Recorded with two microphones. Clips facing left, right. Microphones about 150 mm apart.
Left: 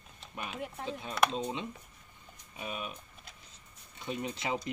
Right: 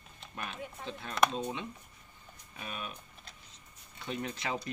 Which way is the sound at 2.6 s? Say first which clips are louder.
Left 3 dB; 10° left (ahead or behind).